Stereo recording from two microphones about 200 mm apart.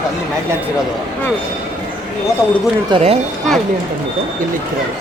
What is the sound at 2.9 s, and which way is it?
Speech, 30° right (ahead or behind).